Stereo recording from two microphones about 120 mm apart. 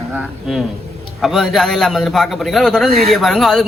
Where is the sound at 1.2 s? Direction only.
Centre (ahead or behind).